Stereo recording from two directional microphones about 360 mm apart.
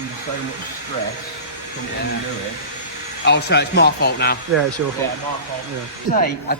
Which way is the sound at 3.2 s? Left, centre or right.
Left.